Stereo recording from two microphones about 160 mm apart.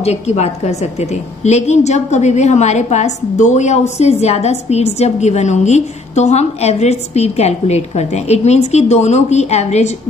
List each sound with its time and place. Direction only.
0.0 s a woman's voice: 45° left (ahead or behind)